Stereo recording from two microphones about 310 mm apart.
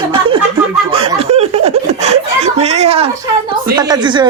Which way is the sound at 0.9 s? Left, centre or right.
Centre.